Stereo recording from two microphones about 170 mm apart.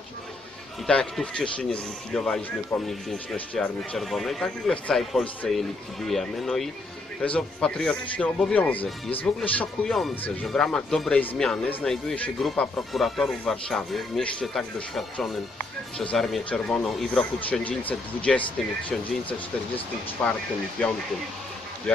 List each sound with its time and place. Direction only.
0.8 s speech: 5° left (ahead or behind)
20.2 s speech: 5° left (ahead or behind)